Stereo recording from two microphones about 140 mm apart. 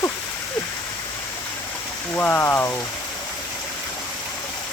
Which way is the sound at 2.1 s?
15° left (ahead or behind).